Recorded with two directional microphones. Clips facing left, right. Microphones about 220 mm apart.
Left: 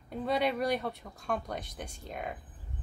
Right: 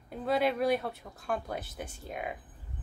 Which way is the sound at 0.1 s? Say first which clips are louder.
Right 1 dB; centre (ahead or behind).